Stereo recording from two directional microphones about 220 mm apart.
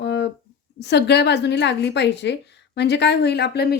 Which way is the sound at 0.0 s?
50° left (ahead or behind).